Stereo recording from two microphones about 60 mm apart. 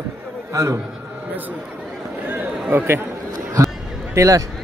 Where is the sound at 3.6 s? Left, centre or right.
Right.